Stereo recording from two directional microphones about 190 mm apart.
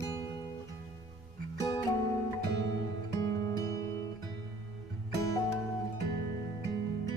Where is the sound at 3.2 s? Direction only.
15° left (ahead or behind).